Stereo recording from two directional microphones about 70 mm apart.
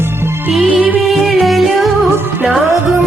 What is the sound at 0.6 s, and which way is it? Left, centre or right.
Music, centre.